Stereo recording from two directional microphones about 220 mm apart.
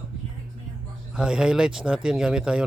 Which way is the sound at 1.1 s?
5° right (ahead or behind).